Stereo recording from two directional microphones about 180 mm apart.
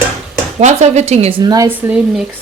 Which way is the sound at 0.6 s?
40° right (ahead or behind).